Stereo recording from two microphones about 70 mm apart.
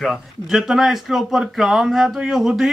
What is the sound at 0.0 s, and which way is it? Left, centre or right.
Speech, centre.